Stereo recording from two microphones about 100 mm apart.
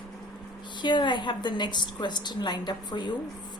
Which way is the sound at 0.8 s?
50° left (ahead or behind).